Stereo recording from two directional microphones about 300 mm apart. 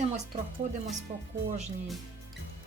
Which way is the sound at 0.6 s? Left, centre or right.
Right.